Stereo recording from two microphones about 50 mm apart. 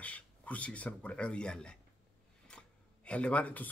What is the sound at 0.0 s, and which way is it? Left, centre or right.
Speech, left.